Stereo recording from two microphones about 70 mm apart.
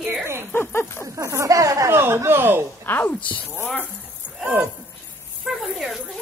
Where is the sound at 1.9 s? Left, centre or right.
Right.